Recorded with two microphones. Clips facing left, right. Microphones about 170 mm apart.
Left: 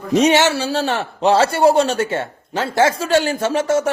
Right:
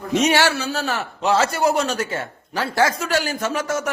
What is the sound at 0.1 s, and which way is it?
A man's voice, 35° left (ahead or behind).